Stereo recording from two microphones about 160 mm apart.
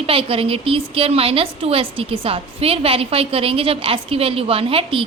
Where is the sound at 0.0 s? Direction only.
35° right (ahead or behind).